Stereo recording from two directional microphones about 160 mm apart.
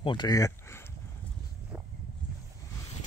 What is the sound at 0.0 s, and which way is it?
Speech, 30° left (ahead or behind).